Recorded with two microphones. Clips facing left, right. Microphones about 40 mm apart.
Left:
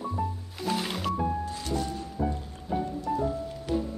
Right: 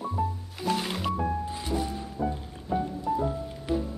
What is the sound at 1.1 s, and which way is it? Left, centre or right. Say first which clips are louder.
Music: left 1 dB; centre.